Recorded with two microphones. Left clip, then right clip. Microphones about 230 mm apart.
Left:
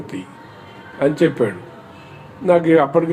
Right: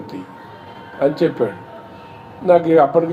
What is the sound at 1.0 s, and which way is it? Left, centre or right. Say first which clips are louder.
Speech: even; left.